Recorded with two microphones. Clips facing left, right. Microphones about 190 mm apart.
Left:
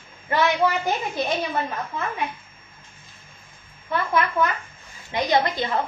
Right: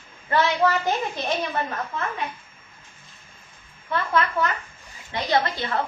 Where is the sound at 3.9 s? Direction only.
10° left (ahead or behind).